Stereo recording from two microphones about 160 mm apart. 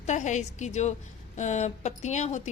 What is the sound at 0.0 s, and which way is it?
A woman's voice, 45° left (ahead or behind).